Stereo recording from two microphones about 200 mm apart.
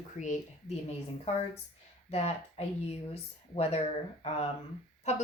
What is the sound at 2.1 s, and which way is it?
Speech, 30° left (ahead or behind).